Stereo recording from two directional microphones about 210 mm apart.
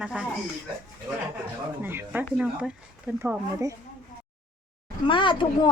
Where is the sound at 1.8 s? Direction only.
10° right (ahead or behind).